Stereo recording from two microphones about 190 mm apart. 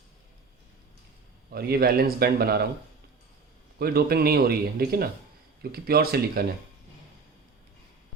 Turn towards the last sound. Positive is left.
turn(degrees=-55)  # may be behind; listen again after turning